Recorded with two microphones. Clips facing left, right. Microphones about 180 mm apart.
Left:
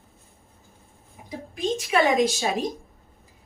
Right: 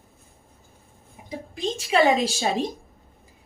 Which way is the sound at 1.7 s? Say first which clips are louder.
Right 1 dB; 30° right (ahead or behind).